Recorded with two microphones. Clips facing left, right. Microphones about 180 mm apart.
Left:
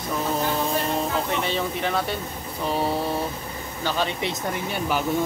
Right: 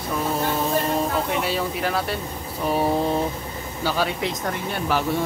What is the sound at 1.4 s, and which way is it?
Speech, 5° right (ahead or behind).